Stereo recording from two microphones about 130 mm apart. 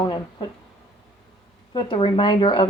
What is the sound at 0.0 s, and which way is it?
Speech, 35° left (ahead or behind).